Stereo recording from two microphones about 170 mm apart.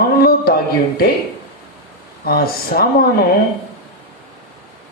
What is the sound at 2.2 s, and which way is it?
Speech, 60° left (ahead or behind).